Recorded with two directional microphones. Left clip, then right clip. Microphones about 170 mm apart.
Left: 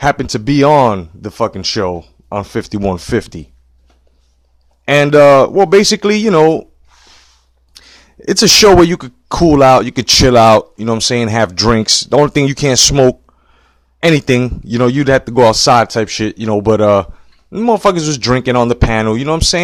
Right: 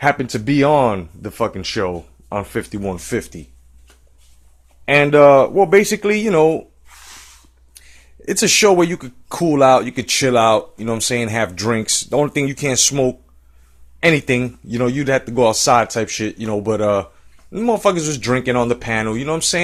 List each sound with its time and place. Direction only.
0.0 s speech: 45° left (ahead or behind)
4.9 s speech: 45° left (ahead or behind)
7.7 s speech: 50° left (ahead or behind)